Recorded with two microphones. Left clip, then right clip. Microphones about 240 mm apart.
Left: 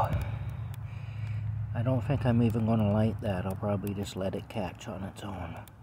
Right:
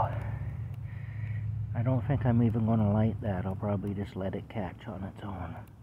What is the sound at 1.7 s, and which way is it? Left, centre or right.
Speech, centre.